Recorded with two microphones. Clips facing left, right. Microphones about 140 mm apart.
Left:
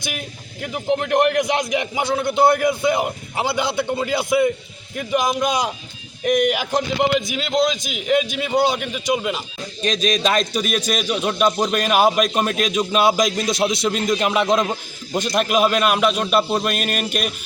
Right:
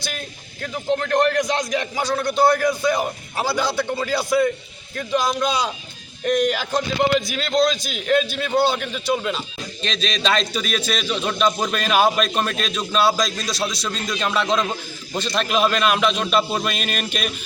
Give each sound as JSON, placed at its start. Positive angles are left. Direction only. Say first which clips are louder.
{"t": 0.0, "sound": "a man's voice", "louder": "left 1 dB", "side_deg": 15}